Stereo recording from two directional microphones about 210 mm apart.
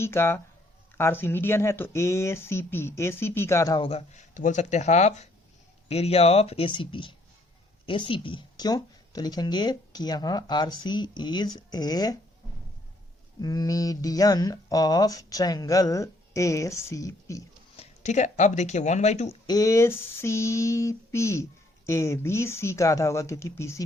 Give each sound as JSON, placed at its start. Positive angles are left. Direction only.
{"t": 0.0, "sound": "speech", "side_deg": 10}
{"t": 3.8, "sound": "speech", "side_deg": 30}
{"t": 13.4, "sound": "speech", "side_deg": 15}
{"t": 17.7, "sound": "speech", "side_deg": 35}
{"t": 19.5, "sound": "speech", "side_deg": 15}